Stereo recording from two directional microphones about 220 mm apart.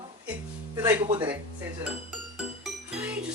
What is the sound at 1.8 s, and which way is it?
Music, centre (ahead or behind).